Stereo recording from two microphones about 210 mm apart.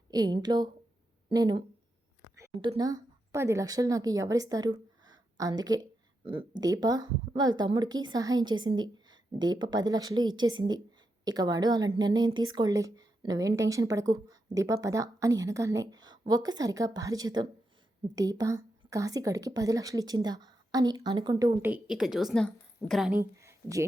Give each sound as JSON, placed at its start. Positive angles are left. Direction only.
{"t": 0.1, "sound": "a woman's voice", "side_deg": -20}
{"t": 23.1, "sound": "speech", "side_deg": -15}